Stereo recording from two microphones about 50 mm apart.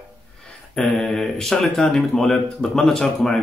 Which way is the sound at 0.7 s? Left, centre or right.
Centre.